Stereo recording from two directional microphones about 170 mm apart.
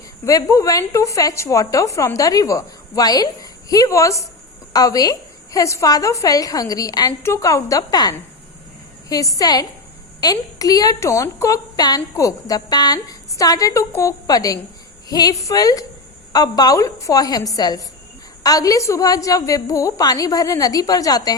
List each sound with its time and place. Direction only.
0.3 s a woman's voice: 20° left (ahead or behind)